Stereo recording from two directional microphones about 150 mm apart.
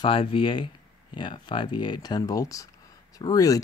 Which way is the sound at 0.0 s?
35° left (ahead or behind).